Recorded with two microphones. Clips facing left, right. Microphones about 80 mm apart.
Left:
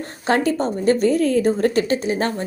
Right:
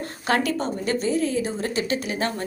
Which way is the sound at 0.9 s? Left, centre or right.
Left.